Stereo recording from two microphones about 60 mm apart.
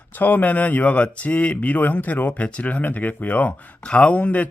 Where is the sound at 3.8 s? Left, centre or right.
Centre.